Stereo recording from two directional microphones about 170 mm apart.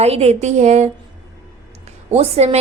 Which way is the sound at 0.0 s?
40° right (ahead or behind).